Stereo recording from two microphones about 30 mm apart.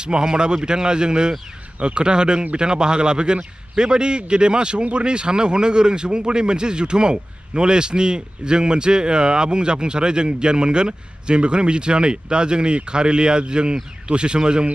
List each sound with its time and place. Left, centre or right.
0.2 s a man's voice: right